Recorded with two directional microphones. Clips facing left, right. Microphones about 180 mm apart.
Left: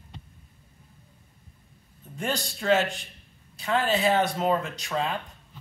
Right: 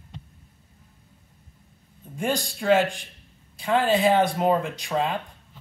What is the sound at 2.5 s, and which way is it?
Speech, 15° right (ahead or behind).